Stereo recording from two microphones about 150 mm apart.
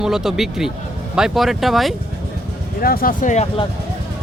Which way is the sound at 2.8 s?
75° left (ahead or behind).